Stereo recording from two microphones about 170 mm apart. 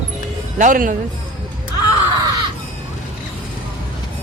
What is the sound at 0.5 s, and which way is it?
Speech, 50° right (ahead or behind).